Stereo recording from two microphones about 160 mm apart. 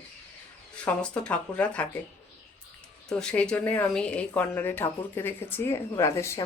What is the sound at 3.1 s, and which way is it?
Speech, 5° left (ahead or behind).